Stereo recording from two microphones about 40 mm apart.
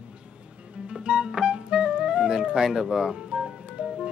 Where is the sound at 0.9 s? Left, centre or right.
Right.